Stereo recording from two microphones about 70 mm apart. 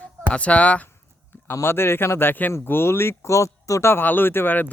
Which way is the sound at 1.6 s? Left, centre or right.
Left.